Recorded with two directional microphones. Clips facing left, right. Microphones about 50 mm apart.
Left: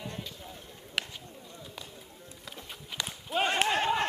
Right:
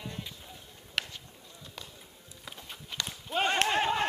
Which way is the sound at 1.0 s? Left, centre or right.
Centre.